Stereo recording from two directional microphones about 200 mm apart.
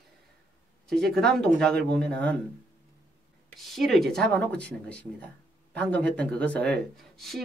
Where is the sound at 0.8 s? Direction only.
Centre (ahead or behind).